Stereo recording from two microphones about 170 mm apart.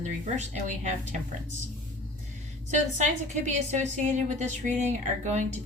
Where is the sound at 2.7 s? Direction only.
45° right (ahead or behind).